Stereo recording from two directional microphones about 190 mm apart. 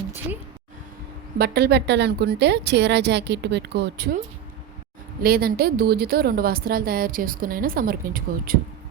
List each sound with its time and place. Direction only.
1.4 s a woman's voice: 55° right (ahead or behind)
5.2 s a woman's voice: 50° right (ahead or behind)